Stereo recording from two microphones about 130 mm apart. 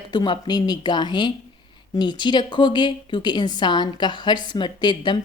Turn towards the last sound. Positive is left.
turn(degrees=35)  # may be behind; listen again after turning